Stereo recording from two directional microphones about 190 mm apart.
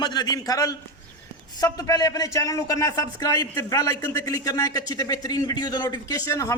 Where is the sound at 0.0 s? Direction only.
20° left (ahead or behind).